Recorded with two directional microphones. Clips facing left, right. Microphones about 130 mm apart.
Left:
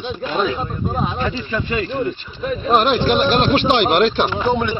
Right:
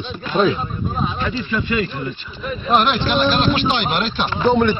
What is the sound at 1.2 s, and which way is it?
Speech, 35° left (ahead or behind).